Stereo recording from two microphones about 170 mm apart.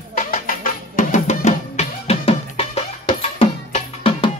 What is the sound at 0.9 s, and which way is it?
Drum, 45° left (ahead or behind).